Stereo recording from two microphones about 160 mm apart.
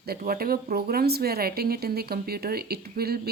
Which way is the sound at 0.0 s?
70° right (ahead or behind).